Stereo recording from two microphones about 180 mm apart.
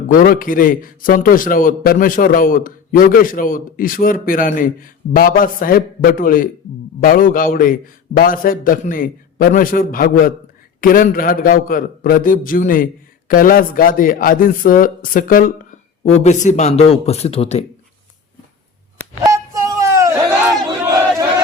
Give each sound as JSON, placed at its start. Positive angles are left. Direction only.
{"t": 0.1, "sound": "a man's voice", "side_deg": 50}
{"t": 19.2, "sound": "a sound", "side_deg": -15}
{"t": 20.7, "sound": "battle cry", "side_deg": -20}